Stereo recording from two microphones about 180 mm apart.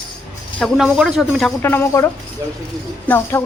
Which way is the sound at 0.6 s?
Centre (ahead or behind).